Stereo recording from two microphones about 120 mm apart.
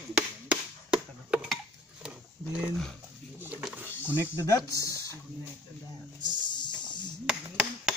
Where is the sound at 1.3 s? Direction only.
5° right (ahead or behind).